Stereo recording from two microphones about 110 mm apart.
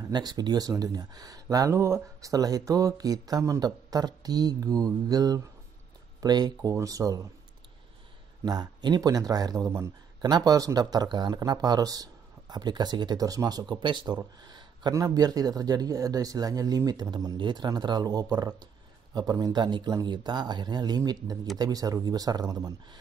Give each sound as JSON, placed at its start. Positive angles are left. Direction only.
{"t": 0.1, "sound": "speech", "side_deg": -40}
{"t": 8.5, "sound": "speech", "side_deg": -40}
{"t": 9.7, "sound": "speech", "side_deg": -25}
{"t": 10.3, "sound": "speech", "side_deg": -35}